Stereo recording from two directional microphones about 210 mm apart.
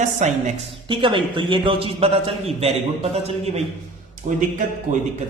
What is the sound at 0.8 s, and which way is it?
A man's voice, 25° right (ahead or behind).